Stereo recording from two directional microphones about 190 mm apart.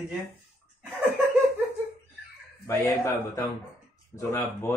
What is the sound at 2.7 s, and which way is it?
Speech, 15° left (ahead or behind).